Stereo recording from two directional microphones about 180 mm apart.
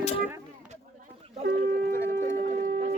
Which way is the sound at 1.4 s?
60° right (ahead or behind).